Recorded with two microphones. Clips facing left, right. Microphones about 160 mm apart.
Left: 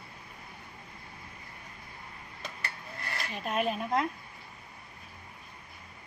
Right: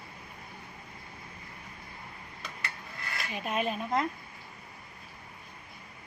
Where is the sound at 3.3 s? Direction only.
5° right (ahead or behind).